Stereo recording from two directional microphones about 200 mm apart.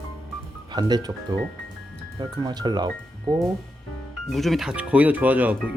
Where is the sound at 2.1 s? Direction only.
20° right (ahead or behind).